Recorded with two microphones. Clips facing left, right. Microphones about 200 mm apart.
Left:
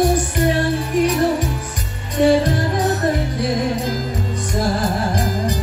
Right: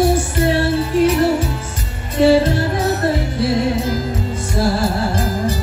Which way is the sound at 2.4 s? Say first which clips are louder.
Right 1 dB; 15° left (ahead or behind).